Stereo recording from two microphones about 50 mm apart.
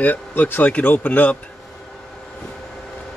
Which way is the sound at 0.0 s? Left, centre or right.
Left.